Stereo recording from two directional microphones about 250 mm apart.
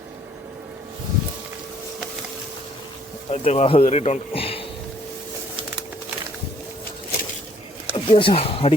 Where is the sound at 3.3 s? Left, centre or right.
Left.